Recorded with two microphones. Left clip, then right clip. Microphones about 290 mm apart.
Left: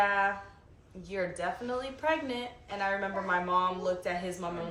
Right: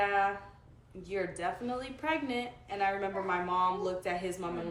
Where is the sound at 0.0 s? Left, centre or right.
Centre.